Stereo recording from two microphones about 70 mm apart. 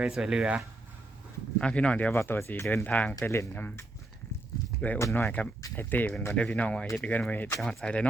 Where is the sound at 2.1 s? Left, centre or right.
Left.